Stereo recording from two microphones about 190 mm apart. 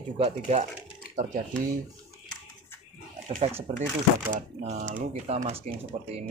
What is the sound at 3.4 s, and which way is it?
Speech, 35° right (ahead or behind).